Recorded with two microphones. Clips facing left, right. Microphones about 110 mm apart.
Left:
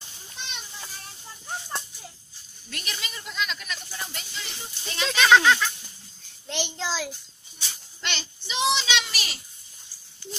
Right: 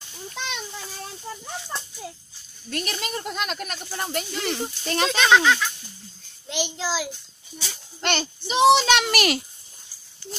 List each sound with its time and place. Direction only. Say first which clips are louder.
2.7 s a child's voice: right 9 dB; 45° right (ahead or behind)
5.2 s speech: left 1 dB; centre (ahead or behind)
6.5 s child singing: right 3 dB; 5° right (ahead or behind)
8.0 s a child's voice: right 9 dB; 50° right (ahead or behind); by 9.4 s 65° right (ahead or behind)